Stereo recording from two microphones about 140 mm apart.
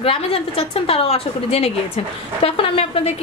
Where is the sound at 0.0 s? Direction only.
40° left (ahead or behind).